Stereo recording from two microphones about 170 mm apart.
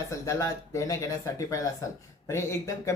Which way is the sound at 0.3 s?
20° left (ahead or behind).